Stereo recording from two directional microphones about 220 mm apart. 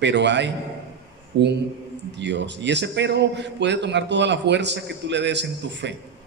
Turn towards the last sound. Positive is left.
turn(degrees=-50)  # may be behind; listen again after turning